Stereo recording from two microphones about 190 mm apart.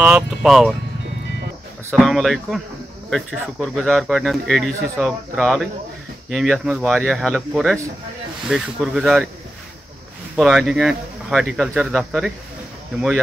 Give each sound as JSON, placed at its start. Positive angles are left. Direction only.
{"t": 0.0, "sound": "speech", "side_deg": -5}
{"t": 1.9, "sound": "speech", "side_deg": 0}
{"t": 10.3, "sound": "speech", "side_deg": 0}